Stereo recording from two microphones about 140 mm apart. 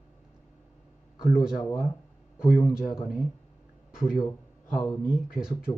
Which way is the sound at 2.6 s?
20° left (ahead or behind).